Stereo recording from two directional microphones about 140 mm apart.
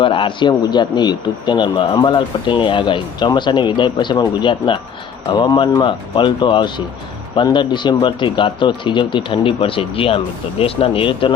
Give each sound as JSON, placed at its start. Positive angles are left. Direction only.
{"t": 0.0, "sound": "speech", "side_deg": 40}